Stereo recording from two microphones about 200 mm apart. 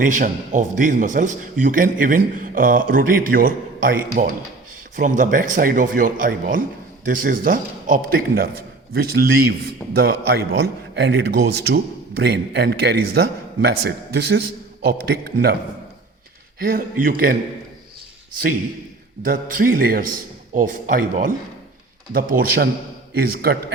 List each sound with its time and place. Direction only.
0.0 s a man's voice: 40° right (ahead or behind)
9.5 s a man's voice: 50° right (ahead or behind)
16.6 s a man's voice: 45° right (ahead or behind)
19.2 s a man's voice: 45° right (ahead or behind)